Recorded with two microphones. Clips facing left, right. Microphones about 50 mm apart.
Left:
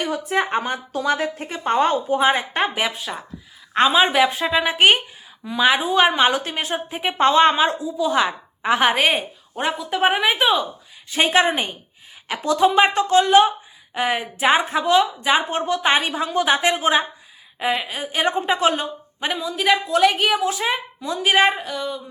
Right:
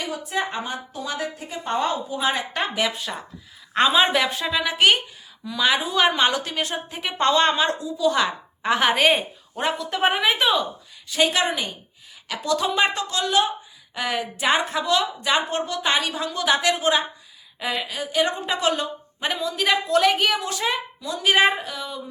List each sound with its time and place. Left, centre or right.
0.0 s a woman's voice: left
2.2 s a woman's voice: left
2.8 s a woman's voice: centre
11.1 s a woman's voice: left
12.9 s a woman's voice: left; by 20.7 s centre
21.0 s a woman's voice: left
21.2 s speech: centre